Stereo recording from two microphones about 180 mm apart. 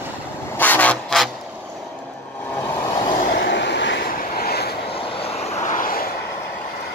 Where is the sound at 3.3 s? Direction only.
75° left (ahead or behind).